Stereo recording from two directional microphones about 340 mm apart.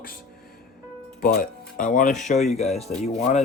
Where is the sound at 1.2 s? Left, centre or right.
Left.